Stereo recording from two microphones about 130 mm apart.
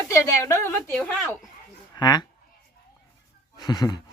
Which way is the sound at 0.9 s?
10° left (ahead or behind).